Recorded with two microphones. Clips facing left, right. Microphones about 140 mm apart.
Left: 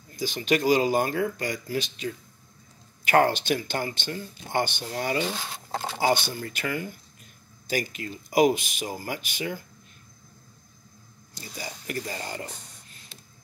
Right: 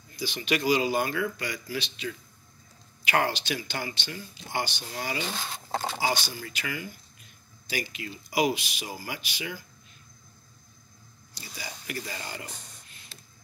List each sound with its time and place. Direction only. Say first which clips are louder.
0.1 s speech: left 4 dB; 45° left (ahead or behind)
11.3 s speech: left 4 dB; 45° left (ahead or behind)
13.1 s printer: left 1 dB; 20° left (ahead or behind)